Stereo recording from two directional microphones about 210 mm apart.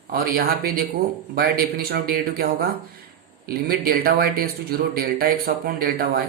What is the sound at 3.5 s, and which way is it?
Speech, 45° right (ahead or behind).